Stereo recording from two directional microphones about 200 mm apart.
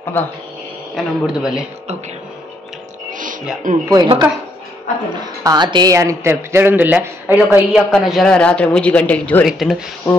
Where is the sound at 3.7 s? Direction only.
40° right (ahead or behind).